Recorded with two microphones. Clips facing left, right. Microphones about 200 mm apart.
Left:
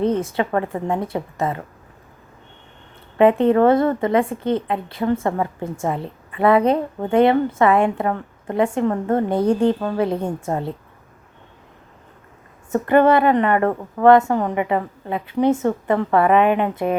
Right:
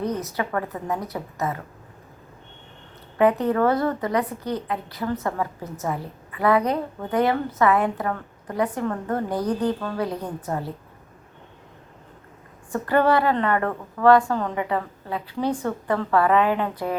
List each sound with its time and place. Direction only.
0.0 s a woman's voice: 25° left (ahead or behind)
3.2 s a woman's voice: 25° left (ahead or behind)
12.7 s a woman's voice: 20° left (ahead or behind)